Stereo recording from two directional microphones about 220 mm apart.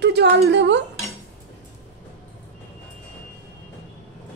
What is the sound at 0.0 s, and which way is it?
Speech, 50° right (ahead or behind).